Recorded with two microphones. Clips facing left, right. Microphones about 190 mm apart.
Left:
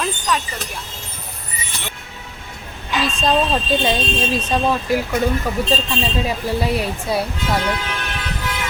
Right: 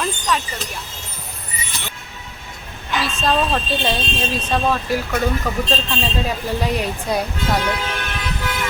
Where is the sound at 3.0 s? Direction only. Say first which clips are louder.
Left 2 dB; 15° left (ahead or behind).